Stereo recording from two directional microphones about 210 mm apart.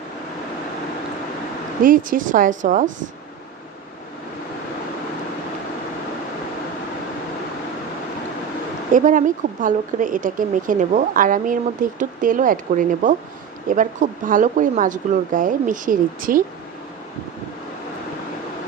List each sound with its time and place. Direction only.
1.8 s speech: 40° right (ahead or behind)
8.9 s speech: 35° right (ahead or behind)